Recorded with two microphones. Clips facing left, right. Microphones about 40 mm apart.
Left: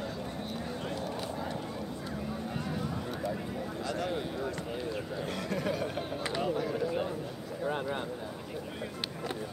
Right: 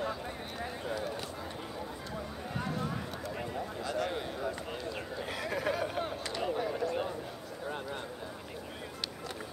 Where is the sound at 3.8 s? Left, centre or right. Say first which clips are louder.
Left 1 dB; centre.